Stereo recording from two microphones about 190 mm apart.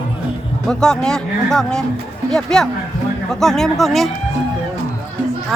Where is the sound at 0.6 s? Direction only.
5° left (ahead or behind).